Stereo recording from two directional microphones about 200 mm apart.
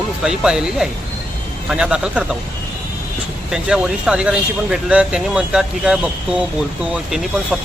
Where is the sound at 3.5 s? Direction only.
5° right (ahead or behind).